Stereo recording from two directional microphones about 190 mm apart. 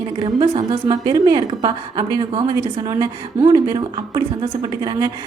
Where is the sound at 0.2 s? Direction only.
25° right (ahead or behind).